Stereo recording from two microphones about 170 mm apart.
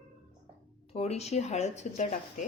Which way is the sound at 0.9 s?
40° left (ahead or behind).